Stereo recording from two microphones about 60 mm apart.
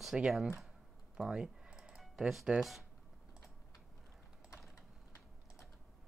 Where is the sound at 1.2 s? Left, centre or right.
Centre.